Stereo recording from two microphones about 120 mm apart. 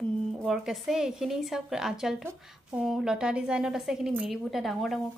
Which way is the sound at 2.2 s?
15° right (ahead or behind).